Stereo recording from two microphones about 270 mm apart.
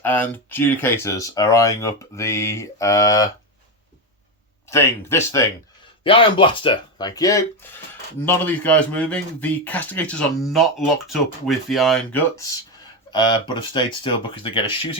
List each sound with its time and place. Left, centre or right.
0.0 s speech: centre
4.7 s a man's voice: centre
13.1 s speech: centre